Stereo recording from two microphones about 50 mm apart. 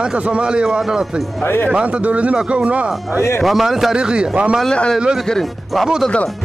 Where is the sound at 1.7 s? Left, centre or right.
Right.